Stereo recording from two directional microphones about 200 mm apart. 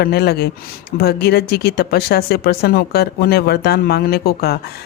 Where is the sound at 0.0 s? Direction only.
55° left (ahead or behind).